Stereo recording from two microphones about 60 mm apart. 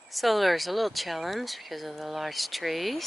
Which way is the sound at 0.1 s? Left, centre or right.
Centre.